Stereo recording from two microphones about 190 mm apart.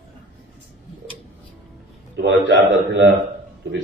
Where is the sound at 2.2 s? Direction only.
70° right (ahead or behind).